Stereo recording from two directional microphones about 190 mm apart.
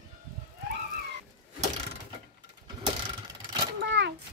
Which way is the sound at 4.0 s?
70° right (ahead or behind).